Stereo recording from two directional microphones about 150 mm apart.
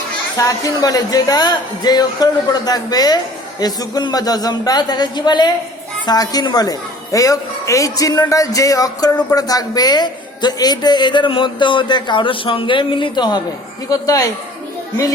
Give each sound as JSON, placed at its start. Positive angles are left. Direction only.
{"t": 0.3, "sound": "speech", "side_deg": 25}